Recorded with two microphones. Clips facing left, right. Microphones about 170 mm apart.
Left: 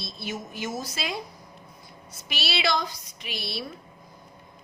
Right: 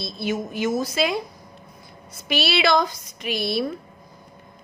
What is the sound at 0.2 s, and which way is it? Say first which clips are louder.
Speech: right 9 dB; 60° right (ahead or behind).